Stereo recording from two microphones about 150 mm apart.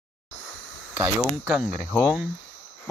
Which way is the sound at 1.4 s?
5° right (ahead or behind).